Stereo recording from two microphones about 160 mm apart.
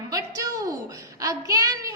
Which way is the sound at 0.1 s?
20° right (ahead or behind).